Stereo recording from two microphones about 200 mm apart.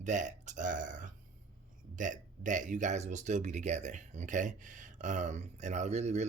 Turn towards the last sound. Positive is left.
turn(degrees=-35)  # may be behind; listen again after turning